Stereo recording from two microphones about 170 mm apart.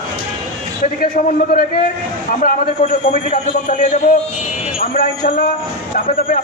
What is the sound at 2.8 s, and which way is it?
A man's voice, 40° left (ahead or behind).